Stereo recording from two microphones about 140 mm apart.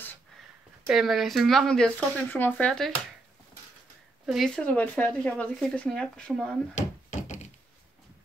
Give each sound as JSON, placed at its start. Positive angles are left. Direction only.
{"t": 0.8, "sound": "speech", "side_deg": 0}
{"t": 2.5, "sound": "speech", "side_deg": 5}
{"t": 4.3, "sound": "speech", "side_deg": 0}
{"t": 6.7, "sound": "a sound", "side_deg": 55}